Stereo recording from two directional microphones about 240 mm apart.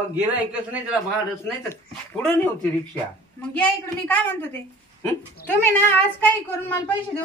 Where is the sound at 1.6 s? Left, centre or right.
Centre.